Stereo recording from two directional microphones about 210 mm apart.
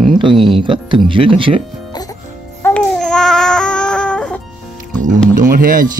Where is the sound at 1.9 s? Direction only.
20° left (ahead or behind).